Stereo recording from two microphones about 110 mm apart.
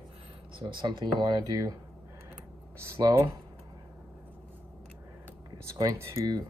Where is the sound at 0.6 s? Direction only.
45° right (ahead or behind).